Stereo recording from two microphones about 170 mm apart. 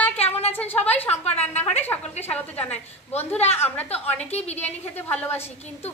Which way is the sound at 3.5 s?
10° left (ahead or behind).